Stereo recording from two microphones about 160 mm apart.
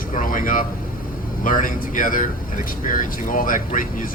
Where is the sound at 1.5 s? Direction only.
60° left (ahead or behind).